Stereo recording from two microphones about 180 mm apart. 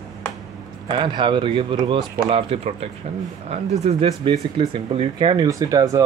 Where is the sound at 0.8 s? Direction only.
25° right (ahead or behind).